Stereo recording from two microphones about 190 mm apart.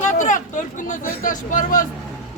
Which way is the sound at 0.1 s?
40° left (ahead or behind).